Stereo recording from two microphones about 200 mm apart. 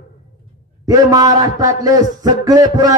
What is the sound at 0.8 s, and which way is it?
A man's voice, 15° right (ahead or behind).